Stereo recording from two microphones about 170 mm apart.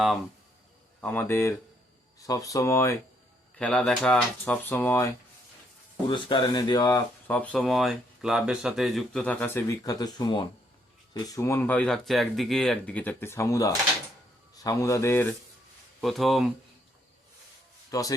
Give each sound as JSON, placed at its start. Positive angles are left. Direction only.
{"t": 1.0, "sound": "speech", "side_deg": 10}
{"t": 3.6, "sound": "speech", "side_deg": 5}
{"t": 6.1, "sound": "speech", "side_deg": 30}
{"t": 7.3, "sound": "speech", "side_deg": 10}
{"t": 16.0, "sound": "speech", "side_deg": 0}
{"t": 17.9, "sound": "speech", "side_deg": 20}